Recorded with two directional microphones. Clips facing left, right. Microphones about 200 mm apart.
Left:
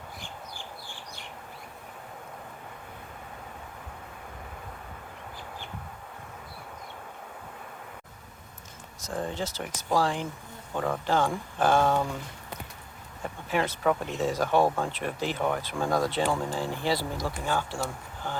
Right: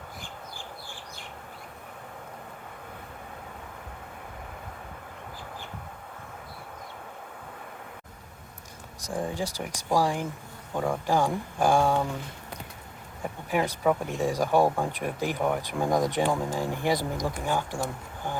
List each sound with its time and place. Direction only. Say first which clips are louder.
9.0 s speech: right 1 dB; 15° right (ahead or behind)
13.2 s speech: right 1 dB; 15° right (ahead or behind)